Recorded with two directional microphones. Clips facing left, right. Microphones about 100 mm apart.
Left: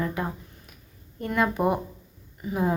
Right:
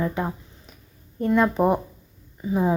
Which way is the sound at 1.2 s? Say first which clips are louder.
Right 5 dB; 25° right (ahead or behind).